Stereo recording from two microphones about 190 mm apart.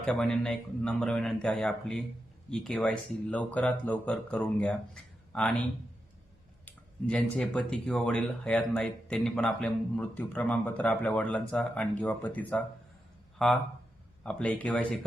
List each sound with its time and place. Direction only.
0.0 s speech: 5° left (ahead or behind)
6.7 s speech: 5° left (ahead or behind)